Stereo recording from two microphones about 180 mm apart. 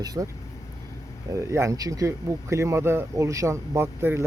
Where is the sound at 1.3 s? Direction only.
15° right (ahead or behind).